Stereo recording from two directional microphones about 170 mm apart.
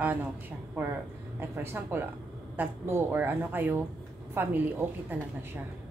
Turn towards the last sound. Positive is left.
turn(degrees=-10)  # may be behind; listen again after turning